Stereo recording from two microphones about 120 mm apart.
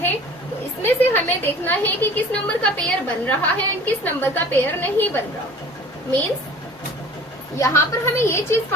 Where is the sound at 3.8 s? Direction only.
15° left (ahead or behind).